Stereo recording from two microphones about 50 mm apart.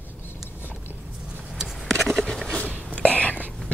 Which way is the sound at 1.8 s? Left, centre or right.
Centre.